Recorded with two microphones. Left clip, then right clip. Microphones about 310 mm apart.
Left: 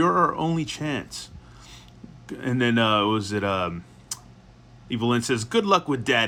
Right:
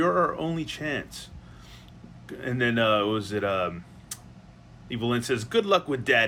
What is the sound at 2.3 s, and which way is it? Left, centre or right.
Speech, centre.